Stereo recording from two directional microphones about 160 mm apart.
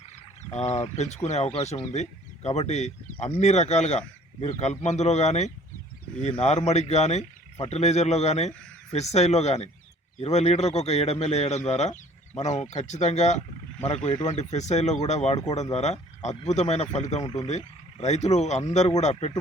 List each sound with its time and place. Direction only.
0.5 s speech: 45° left (ahead or behind)